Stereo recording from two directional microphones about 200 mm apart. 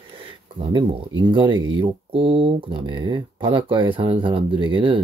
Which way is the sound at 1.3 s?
25° right (ahead or behind).